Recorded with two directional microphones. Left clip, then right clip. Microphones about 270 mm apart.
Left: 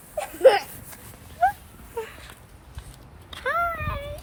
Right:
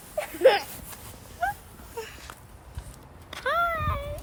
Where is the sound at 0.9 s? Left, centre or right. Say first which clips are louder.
Left 3 dB; centre.